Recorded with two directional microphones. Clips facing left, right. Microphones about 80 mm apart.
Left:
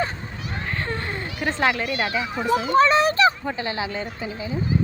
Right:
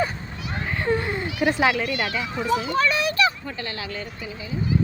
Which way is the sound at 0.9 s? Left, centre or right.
Centre.